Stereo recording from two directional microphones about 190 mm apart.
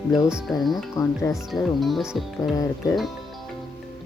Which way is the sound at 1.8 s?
Centre (ahead or behind).